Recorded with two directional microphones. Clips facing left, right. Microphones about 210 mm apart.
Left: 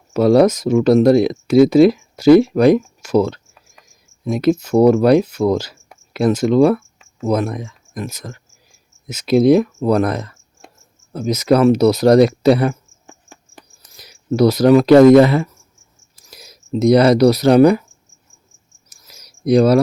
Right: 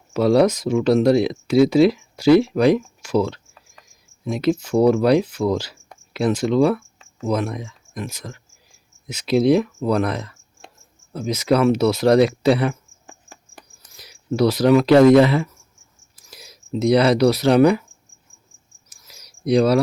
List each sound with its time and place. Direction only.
0.1 s speech: 45° left (ahead or behind)
13.1 s cricket: 5° right (ahead or behind)
13.9 s speech: 40° left (ahead or behind)
18.9 s a sound: 45° left (ahead or behind)